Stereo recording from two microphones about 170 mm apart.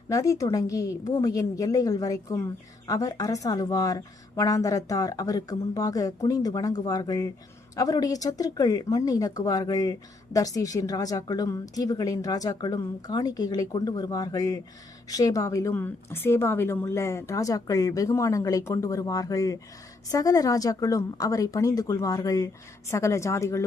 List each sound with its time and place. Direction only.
0.1 s a woman's voice: 20° left (ahead or behind)